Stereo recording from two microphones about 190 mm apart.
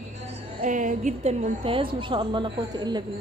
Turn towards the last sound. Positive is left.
turn(degrees=-20)  # may be behind; listen again after turning